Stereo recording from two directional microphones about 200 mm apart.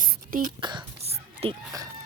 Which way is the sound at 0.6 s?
25° right (ahead or behind).